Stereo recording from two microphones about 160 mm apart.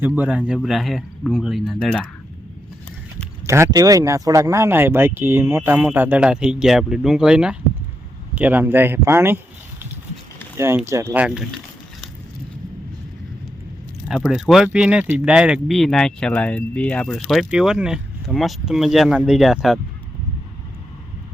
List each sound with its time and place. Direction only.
0.0 s speech: 10° right (ahead or behind)
3.4 s speech: 15° right (ahead or behind)
10.6 s speech: 15° right (ahead or behind)
14.1 s speech: centre (ahead or behind)